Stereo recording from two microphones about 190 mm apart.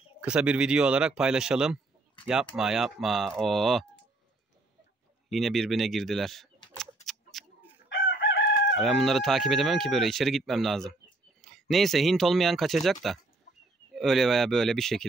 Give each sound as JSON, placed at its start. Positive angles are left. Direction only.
{"t": 0.2, "sound": "speech", "side_deg": -5}
{"t": 5.3, "sound": "speech", "side_deg": 0}
{"t": 7.3, "sound": "chicken", "side_deg": 0}
{"t": 7.9, "sound": "chicken", "side_deg": 70}
{"t": 8.7, "sound": "speech", "side_deg": 0}